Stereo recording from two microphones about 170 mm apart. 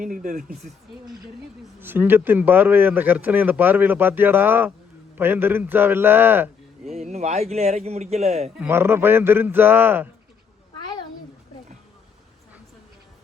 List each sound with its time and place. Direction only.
0.0 s speech: 55° right (ahead or behind)
1.8 s speech: 10° right (ahead or behind)
6.9 s speech: 40° right (ahead or behind)
8.5 s speech: 15° right (ahead or behind)